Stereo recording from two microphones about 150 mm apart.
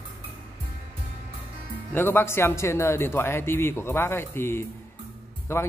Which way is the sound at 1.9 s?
15° left (ahead or behind).